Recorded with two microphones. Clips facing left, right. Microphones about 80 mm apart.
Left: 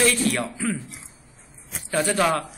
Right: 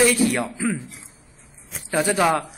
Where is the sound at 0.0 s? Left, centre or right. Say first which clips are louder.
Right 3 dB; centre.